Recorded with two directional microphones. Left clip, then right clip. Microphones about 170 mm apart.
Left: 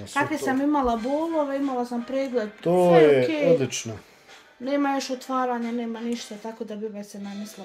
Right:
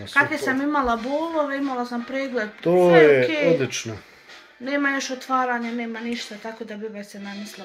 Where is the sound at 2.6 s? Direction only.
5° right (ahead or behind).